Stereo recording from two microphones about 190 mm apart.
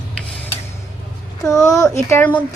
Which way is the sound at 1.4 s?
15° left (ahead or behind).